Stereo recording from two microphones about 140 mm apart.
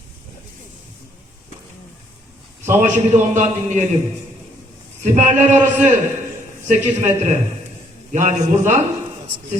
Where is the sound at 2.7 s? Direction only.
60° right (ahead or behind).